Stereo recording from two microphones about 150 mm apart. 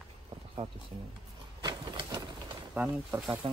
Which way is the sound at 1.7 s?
30° right (ahead or behind).